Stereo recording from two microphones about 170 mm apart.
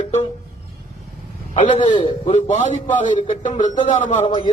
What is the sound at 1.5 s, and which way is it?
A man's voice, 45° left (ahead or behind).